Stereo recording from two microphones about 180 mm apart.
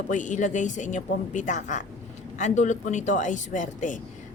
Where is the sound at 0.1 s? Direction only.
45° left (ahead or behind).